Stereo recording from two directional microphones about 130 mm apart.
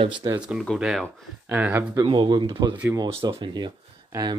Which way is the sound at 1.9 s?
30° right (ahead or behind).